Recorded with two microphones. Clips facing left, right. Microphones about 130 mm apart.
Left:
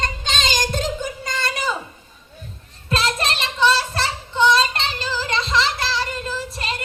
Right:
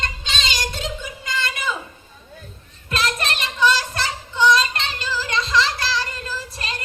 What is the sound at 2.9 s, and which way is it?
Child singing, 30° left (ahead or behind).